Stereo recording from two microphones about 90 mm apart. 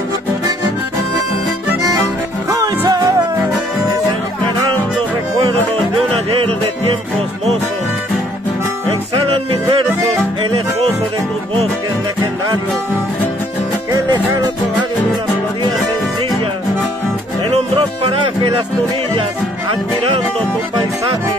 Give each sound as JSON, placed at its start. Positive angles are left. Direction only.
{"t": 2.9, "sound": "music", "side_deg": -40}
{"t": 9.1, "sound": "music", "side_deg": -85}